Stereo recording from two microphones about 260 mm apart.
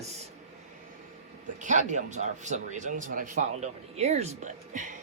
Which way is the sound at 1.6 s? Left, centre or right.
Right.